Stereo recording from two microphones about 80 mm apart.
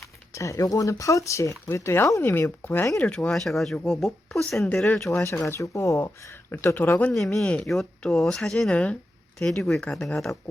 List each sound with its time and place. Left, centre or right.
0.3 s speech: left
3.0 s speech: centre
4.7 s speech: centre
5.2 s speech: left
7.1 s speech: centre
7.4 s speech: centre